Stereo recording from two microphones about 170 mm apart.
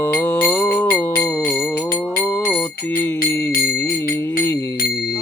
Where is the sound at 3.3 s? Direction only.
15° left (ahead or behind).